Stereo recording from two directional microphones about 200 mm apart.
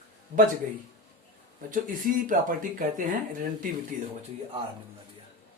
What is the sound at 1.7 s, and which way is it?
Speech, 40° right (ahead or behind).